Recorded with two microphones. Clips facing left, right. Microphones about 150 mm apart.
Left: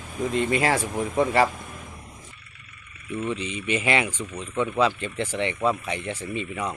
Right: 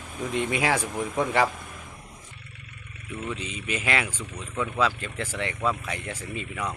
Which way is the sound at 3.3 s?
5° right (ahead or behind).